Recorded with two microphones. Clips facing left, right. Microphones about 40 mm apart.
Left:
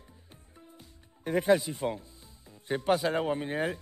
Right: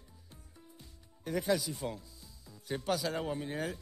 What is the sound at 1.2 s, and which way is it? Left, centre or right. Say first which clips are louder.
Speech: left 7 dB; left.